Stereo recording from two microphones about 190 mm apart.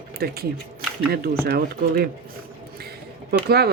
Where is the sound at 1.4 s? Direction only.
55° right (ahead or behind).